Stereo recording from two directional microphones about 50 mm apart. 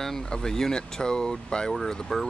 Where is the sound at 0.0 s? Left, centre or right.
Centre.